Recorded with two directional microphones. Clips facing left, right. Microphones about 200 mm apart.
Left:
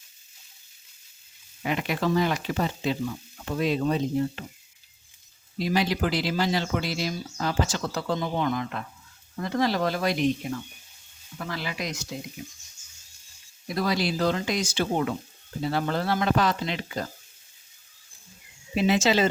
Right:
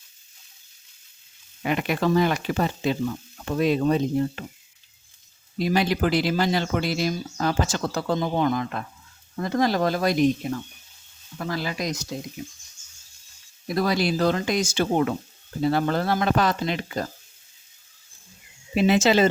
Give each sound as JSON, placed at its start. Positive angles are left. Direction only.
{"t": 1.6, "sound": "speech", "side_deg": -55}
{"t": 5.5, "sound": "speech", "side_deg": -55}
{"t": 11.3, "sound": "speech", "side_deg": -40}
{"t": 13.7, "sound": "speech", "side_deg": -50}
{"t": 18.7, "sound": "speech", "side_deg": -60}